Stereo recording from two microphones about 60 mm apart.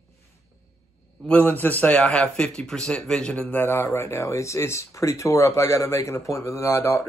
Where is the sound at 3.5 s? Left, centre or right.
Left.